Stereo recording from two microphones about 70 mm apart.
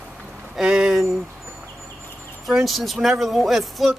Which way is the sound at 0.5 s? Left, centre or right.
Centre.